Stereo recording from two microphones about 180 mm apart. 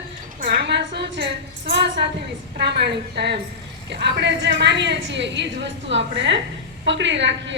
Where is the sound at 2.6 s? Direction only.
70° right (ahead or behind).